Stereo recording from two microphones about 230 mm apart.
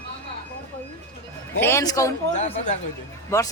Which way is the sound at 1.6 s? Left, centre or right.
Centre.